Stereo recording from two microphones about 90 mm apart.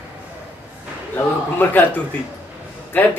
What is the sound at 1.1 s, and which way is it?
Speech, 20° left (ahead or behind).